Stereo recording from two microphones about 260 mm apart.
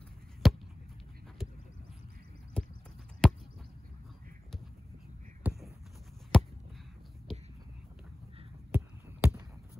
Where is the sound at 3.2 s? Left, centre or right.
Centre.